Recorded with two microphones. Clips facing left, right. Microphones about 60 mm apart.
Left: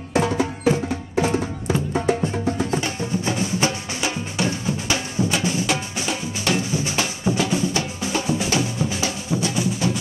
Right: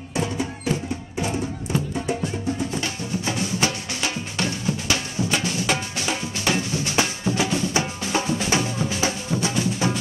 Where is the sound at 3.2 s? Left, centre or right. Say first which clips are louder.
Left 1 dB; left.